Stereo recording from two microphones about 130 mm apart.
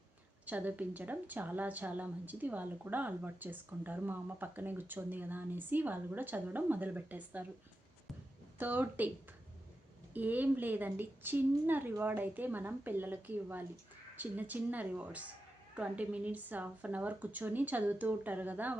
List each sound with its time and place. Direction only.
0.4 s a woman's voice: 10° right (ahead or behind)
8.5 s a woman's voice: 15° right (ahead or behind)
10.2 s a woman's voice: 15° right (ahead or behind)